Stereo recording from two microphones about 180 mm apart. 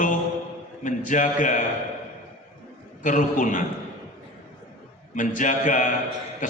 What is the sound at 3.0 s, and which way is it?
Speech, 45° left (ahead or behind).